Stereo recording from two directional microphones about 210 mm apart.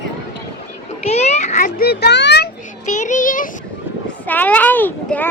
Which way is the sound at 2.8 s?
35° left (ahead or behind).